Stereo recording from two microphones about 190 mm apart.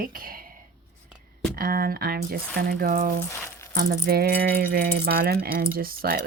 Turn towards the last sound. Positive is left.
turn(degrees=-50)  # may be behind; listen again after turning